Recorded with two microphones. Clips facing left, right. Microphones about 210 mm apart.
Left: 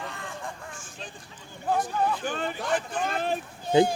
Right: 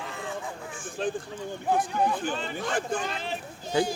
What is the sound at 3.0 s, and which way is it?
Speech, 50° left (ahead or behind).